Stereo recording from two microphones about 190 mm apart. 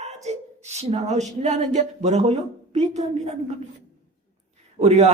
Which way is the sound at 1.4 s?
40° right (ahead or behind).